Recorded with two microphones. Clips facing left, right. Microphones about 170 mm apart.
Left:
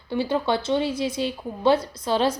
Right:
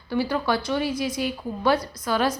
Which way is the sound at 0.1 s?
25° left (ahead or behind).